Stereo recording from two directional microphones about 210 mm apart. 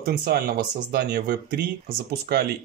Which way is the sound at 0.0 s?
45° right (ahead or behind).